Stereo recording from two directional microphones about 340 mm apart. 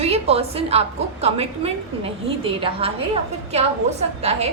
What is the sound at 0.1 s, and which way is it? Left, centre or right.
A woman's voice, centre.